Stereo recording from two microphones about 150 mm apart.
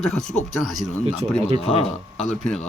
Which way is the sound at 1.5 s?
40° left (ahead or behind).